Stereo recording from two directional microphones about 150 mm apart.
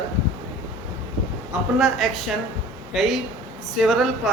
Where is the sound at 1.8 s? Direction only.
Centre (ahead or behind).